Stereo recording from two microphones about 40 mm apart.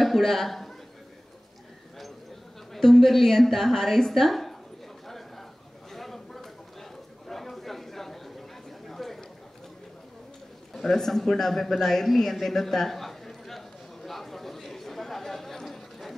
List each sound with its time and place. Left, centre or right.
0.0 s a man's voice: centre
2.7 s a woman's voice: centre
5.9 s a sound: centre
7.2 s chatter: centre
10.7 s a sound: centre
15.6 s clip-clop: centre